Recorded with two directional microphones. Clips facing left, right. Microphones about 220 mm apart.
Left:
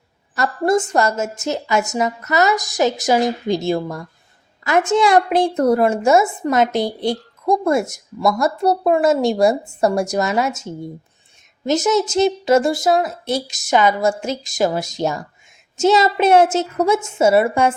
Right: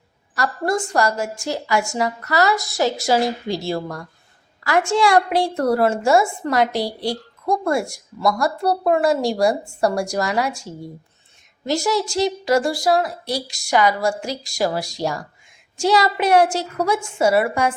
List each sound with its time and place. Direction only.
0.3 s a woman's voice: 20° left (ahead or behind)